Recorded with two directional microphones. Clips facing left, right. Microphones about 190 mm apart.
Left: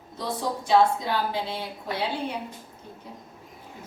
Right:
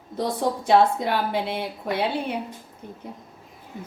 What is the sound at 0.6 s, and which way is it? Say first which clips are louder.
A woman's voice: right 2 dB; 60° right (ahead or behind).